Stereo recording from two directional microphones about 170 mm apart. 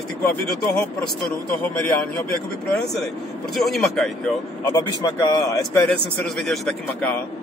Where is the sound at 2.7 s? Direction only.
Centre (ahead or behind).